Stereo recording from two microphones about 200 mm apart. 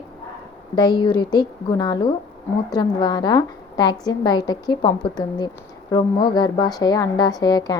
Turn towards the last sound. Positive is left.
turn(degrees=20)  # may be behind; listen again after turning